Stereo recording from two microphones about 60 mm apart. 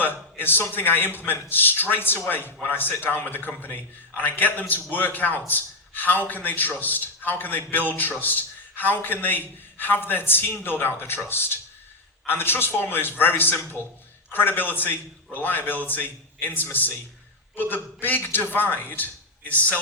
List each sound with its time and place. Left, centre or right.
0.0 s a man's voice: left